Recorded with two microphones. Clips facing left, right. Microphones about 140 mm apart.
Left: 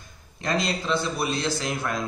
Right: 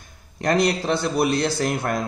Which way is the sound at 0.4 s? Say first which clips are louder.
Right 6 dB; 65° right (ahead or behind).